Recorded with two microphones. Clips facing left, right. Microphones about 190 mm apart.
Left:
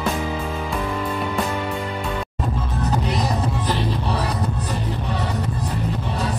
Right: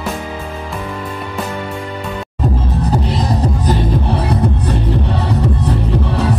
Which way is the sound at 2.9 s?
35° right (ahead or behind).